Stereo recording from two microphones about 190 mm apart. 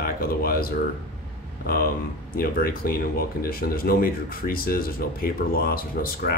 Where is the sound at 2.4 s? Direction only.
50° left (ahead or behind).